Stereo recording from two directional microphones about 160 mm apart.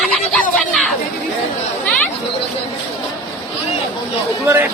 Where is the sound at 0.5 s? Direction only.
Centre (ahead or behind).